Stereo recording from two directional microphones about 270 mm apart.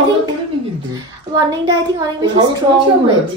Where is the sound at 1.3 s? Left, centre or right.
Centre.